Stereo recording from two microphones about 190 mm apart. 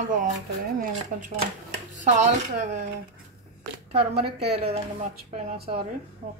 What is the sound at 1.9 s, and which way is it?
Speech, 40° right (ahead or behind).